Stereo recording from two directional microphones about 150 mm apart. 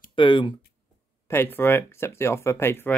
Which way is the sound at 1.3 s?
15° left (ahead or behind).